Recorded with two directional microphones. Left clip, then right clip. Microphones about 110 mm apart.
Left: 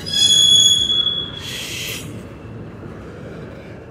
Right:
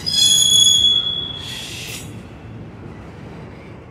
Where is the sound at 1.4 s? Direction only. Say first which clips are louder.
Left 2 dB; 20° left (ahead or behind).